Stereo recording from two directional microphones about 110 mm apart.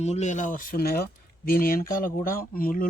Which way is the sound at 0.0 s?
85° left.